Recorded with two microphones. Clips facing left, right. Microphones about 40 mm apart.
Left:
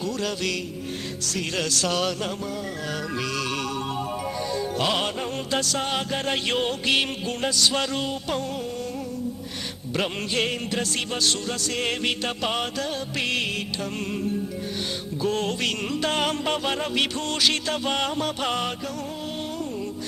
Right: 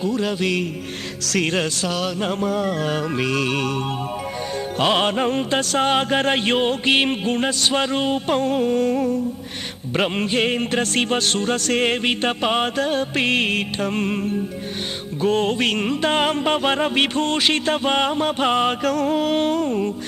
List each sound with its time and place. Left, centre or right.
0.0 s a man's voice: right
1.5 s a man's voice: right
1.8 s a man's voice: centre
2.3 s music: right
4.8 s mantra: right
9.9 s mantra: right
18.7 s music: right